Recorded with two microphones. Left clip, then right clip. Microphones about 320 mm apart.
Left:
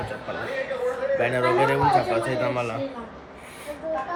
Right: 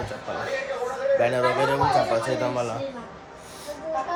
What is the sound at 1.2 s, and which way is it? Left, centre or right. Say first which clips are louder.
Speech: right 2 dB; centre.